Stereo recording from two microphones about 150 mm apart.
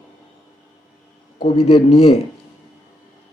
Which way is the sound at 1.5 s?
45° left (ahead or behind).